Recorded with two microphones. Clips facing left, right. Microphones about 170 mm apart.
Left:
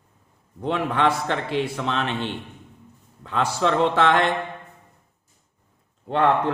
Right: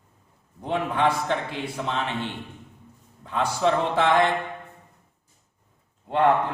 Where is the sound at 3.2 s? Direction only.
85° left.